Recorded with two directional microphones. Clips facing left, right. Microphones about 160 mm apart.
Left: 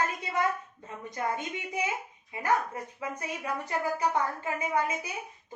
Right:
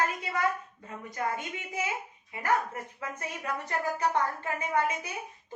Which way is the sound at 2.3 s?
15° left (ahead or behind).